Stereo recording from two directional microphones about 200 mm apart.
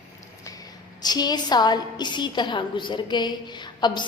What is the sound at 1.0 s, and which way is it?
A woman's voice, 20° left (ahead or behind).